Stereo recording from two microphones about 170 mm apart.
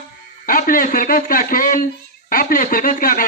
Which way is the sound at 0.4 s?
55° left (ahead or behind).